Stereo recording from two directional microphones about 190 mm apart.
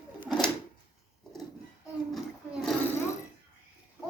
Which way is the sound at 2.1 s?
Centre (ahead or behind).